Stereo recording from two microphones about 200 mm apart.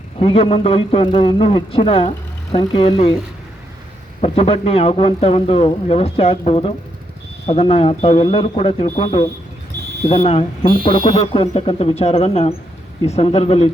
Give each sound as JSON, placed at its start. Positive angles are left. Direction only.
{"t": 0.2, "sound": "speech", "side_deg": 30}
{"t": 4.2, "sound": "speech", "side_deg": 30}